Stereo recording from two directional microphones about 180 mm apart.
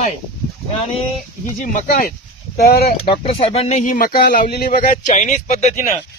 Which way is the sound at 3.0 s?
30° left (ahead or behind).